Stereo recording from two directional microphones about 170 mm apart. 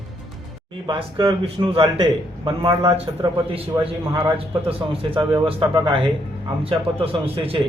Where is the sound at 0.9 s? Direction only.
30° right (ahead or behind).